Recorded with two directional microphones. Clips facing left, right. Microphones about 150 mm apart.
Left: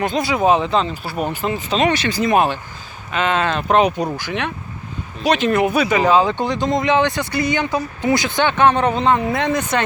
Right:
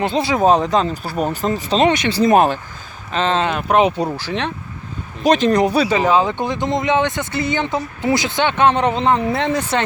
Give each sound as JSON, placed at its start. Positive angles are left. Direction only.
{"t": 0.0, "sound": "speech", "side_deg": -30}
{"t": 0.3, "sound": "speech", "side_deg": -40}
{"t": 1.9, "sound": "speech", "side_deg": -20}
{"t": 2.1, "sound": "speech", "side_deg": -40}
{"t": 3.1, "sound": "speech", "side_deg": -30}
{"t": 3.4, "sound": "speech", "side_deg": -15}
{"t": 3.8, "sound": "speech", "side_deg": -30}
{"t": 6.5, "sound": "speech", "side_deg": -20}